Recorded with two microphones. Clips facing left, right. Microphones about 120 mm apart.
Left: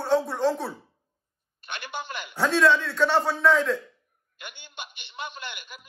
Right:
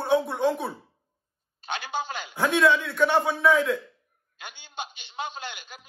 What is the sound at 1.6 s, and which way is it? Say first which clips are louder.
Speech: right 5 dB; 55° left (ahead or behind).